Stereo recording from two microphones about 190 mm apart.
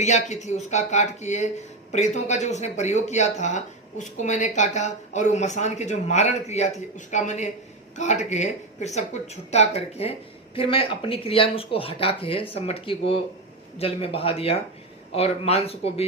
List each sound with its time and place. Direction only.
0.0 s speech: 40° left (ahead or behind)